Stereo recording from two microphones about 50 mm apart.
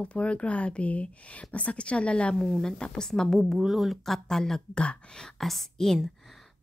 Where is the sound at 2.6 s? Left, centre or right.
Centre.